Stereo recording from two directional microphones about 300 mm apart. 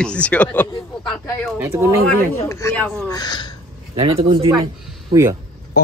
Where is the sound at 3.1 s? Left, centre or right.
Centre.